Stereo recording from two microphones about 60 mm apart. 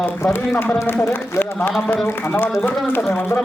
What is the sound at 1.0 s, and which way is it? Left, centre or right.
Speech, left.